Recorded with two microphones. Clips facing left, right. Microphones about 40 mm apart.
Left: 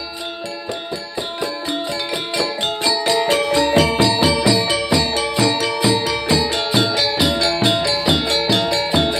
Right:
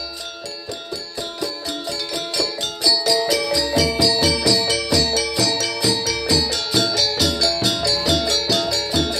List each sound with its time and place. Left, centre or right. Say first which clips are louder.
2.3 s music: left 5 dB; left